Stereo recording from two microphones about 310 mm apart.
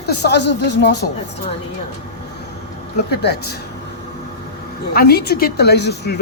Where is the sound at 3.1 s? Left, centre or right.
Left.